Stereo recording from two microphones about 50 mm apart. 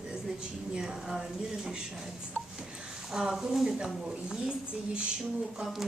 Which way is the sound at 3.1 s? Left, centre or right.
Centre.